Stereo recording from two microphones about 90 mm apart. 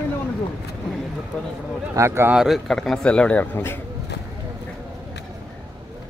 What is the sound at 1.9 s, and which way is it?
Speech, 30° right (ahead or behind).